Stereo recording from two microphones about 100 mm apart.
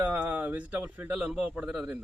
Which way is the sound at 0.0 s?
15° right (ahead or behind).